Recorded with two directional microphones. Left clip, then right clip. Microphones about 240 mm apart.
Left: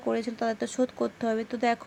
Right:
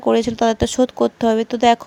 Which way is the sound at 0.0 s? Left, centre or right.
Right.